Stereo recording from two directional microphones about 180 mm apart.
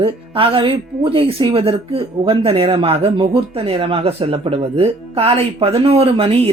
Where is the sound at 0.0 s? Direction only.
30° right (ahead or behind).